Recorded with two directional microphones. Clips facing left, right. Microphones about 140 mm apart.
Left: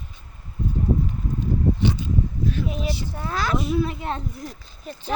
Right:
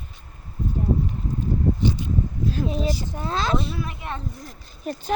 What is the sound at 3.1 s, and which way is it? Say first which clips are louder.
Speech: right 1 dB; 20° right (ahead or behind).